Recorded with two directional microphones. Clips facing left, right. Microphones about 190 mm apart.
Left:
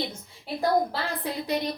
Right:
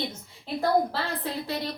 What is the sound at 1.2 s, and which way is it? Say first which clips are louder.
Speech: left 2 dB; 15° left (ahead or behind).